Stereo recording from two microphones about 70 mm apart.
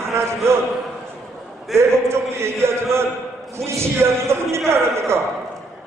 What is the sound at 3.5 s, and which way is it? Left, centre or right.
A man's voice, right.